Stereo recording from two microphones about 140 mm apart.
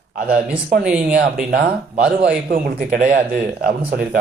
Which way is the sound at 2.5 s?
85° right.